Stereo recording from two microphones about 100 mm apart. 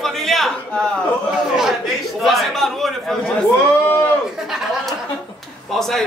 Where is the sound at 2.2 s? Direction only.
Centre (ahead or behind).